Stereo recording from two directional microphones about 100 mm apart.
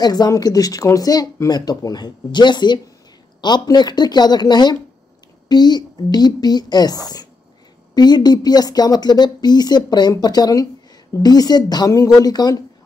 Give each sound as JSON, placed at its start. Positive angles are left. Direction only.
{"t": 0.0, "sound": "speech", "side_deg": 40}